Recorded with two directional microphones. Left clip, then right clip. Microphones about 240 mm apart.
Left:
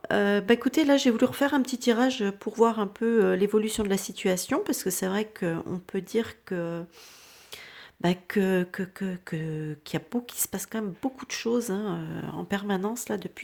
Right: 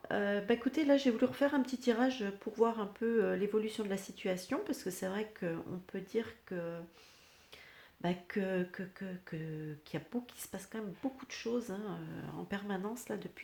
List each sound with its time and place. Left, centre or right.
0.0 s speech: left
8.0 s speech: left